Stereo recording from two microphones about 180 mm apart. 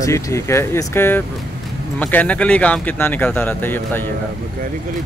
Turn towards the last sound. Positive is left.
turn(degrees=10)  # may be behind; listen again after turning